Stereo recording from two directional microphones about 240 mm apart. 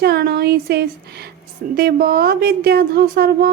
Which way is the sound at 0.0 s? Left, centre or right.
Right.